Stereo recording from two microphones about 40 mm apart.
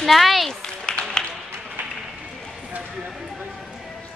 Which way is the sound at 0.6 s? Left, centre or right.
Left.